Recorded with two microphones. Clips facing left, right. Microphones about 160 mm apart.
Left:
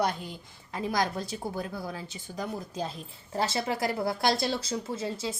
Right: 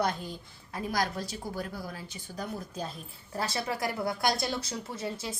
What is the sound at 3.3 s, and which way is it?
Speech, 25° left (ahead or behind).